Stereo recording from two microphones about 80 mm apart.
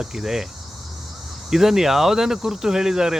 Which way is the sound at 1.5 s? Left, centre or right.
Centre.